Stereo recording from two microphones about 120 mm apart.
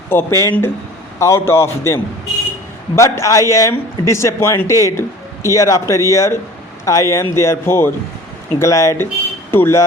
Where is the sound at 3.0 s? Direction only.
25° left (ahead or behind).